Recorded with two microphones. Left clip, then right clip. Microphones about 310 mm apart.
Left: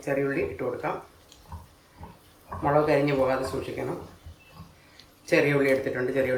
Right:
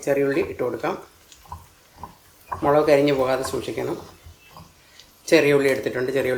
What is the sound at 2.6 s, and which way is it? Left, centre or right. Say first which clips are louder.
Speech: right 6 dB; right.